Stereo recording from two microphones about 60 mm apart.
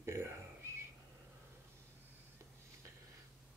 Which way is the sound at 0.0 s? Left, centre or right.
Right.